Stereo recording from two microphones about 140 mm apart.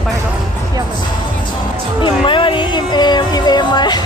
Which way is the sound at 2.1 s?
35° left (ahead or behind).